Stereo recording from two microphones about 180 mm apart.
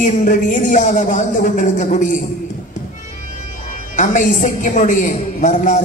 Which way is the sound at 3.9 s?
45° left (ahead or behind).